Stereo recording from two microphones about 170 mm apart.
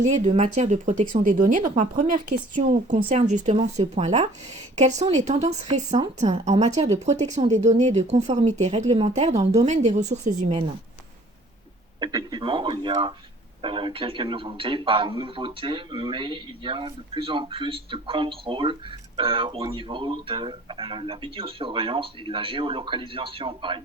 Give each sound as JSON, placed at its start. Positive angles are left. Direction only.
{"t": 0.0, "sound": "a woman's voice", "side_deg": -40}
{"t": 11.9, "sound": "a man's voice", "side_deg": -25}